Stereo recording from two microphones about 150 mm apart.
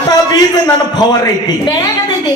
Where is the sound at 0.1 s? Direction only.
25° left (ahead or behind).